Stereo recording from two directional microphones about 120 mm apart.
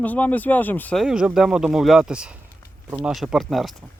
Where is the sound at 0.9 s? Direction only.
5° right (ahead or behind).